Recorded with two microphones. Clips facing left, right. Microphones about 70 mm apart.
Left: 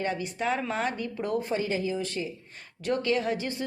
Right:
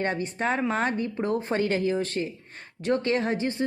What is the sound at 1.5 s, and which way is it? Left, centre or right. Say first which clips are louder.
Speech: right 4 dB; right.